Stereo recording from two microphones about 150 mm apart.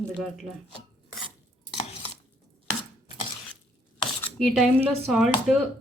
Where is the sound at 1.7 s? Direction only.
45° left (ahead or behind).